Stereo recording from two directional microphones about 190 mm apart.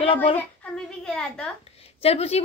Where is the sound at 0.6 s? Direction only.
5° left (ahead or behind).